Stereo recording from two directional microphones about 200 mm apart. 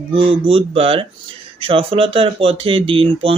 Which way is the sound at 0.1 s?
25° right (ahead or behind).